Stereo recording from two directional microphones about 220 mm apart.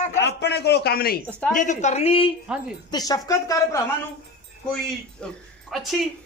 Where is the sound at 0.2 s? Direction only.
50° left (ahead or behind); by 3.8 s 15° left (ahead or behind).